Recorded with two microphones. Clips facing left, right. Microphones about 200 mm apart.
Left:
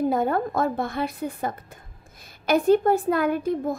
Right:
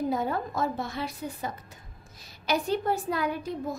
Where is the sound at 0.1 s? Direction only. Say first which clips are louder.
Left 6 dB; 55° left (ahead or behind).